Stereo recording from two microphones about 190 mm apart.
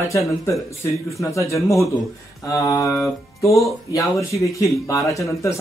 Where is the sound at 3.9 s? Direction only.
15° left (ahead or behind).